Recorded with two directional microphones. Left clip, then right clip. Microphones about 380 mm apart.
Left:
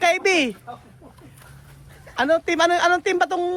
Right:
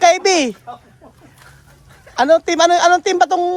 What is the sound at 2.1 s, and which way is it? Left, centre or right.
Speech, centre.